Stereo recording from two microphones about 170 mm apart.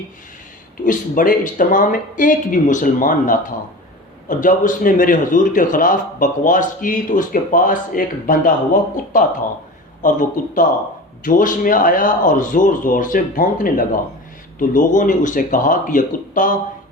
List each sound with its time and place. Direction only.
0.9 s a man's voice: 50° left (ahead or behind)